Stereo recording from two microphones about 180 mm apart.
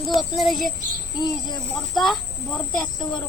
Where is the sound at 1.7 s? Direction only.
Centre (ahead or behind).